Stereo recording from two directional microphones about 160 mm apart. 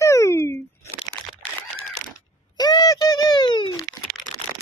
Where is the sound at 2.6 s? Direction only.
25° left (ahead or behind).